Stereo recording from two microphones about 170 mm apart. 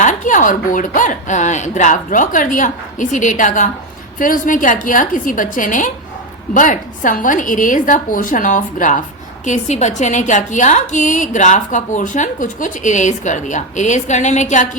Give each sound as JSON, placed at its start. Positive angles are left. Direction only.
{"t": 0.0, "sound": "a woman's voice", "side_deg": 45}